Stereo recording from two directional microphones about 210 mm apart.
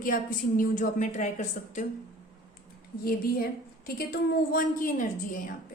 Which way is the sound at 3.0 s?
45° left (ahead or behind).